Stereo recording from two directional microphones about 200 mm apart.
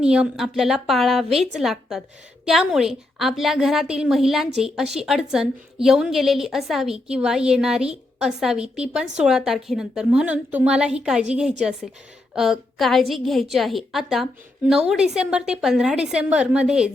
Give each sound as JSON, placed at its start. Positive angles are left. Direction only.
{"t": 0.0, "sound": "a woman's voice", "side_deg": -5}